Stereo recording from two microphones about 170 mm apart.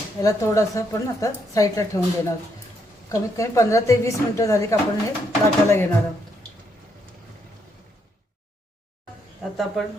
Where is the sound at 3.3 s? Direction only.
20° left (ahead or behind).